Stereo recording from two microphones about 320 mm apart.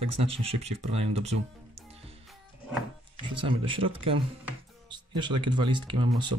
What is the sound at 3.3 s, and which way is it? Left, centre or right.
Speech, centre.